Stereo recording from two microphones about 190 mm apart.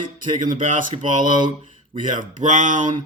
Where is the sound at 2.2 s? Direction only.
40° right (ahead or behind).